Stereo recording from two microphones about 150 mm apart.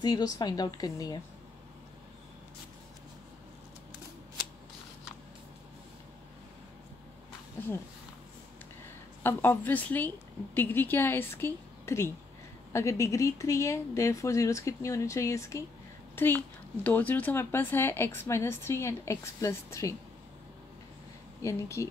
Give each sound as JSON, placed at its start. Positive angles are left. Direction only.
{"t": 0.0, "sound": "speech", "side_deg": 25}
{"t": 9.2, "sound": "speech", "side_deg": 15}
{"t": 21.4, "sound": "speech", "side_deg": 20}